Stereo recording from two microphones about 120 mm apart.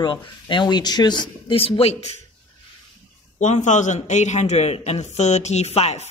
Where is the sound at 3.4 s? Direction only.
90° left.